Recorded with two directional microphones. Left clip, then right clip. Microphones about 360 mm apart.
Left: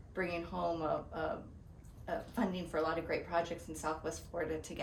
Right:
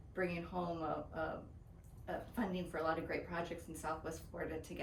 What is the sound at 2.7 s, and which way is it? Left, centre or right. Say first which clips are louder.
Speech: left 4 dB; centre.